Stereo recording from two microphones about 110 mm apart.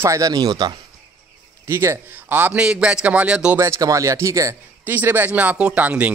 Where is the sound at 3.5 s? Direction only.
25° right (ahead or behind).